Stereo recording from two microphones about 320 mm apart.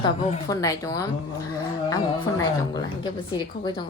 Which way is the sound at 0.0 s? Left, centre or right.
Centre.